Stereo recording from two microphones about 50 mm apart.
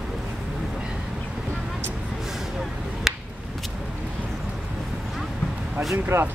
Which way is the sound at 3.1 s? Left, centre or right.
Centre.